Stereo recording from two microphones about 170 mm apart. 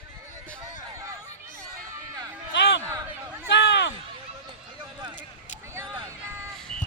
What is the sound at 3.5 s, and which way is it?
Speech, 90° left.